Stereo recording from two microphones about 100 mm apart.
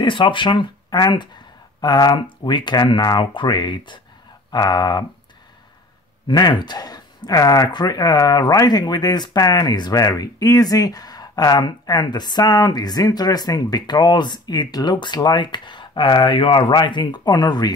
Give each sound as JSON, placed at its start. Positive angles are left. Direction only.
{"t": 0.0, "sound": "speech", "side_deg": 55}
{"t": 6.2, "sound": "speech", "side_deg": 45}